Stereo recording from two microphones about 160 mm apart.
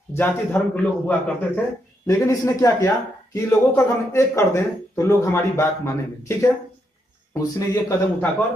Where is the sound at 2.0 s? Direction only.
20° left (ahead or behind).